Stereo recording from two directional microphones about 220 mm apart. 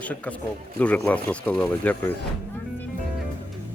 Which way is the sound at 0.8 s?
5° left (ahead or behind).